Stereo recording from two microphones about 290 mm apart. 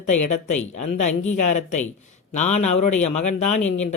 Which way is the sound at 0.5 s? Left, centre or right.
Left.